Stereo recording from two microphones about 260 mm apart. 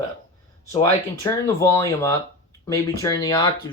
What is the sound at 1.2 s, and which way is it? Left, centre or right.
Speech, centre.